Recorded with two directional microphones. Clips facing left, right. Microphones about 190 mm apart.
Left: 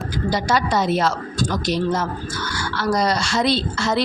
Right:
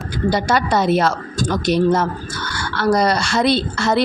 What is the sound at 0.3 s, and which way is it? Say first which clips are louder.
A woman's voice: right 3 dB; 60° right (ahead or behind).